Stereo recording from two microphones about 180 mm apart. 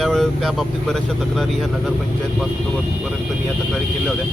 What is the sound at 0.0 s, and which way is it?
Speech, centre (ahead or behind).